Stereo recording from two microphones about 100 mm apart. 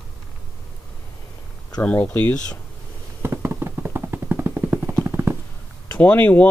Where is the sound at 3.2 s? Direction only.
25° right (ahead or behind).